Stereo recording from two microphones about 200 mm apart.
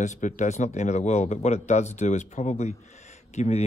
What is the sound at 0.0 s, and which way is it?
Speech, 35° left (ahead or behind).